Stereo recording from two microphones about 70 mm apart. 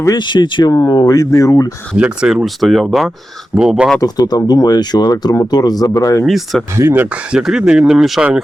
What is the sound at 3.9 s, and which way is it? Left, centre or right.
Speech, left.